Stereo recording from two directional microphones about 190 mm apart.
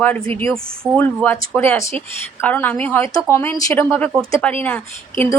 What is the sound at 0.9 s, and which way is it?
Speech, 10° left (ahead or behind).